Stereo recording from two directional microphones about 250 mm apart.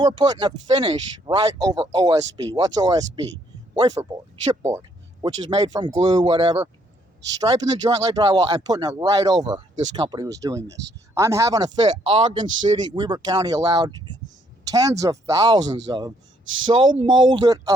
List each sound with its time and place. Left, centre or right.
0.0 s speech: centre